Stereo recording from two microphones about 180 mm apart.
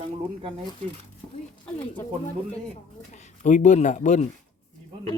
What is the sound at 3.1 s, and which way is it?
Speech, 40° left (ahead or behind).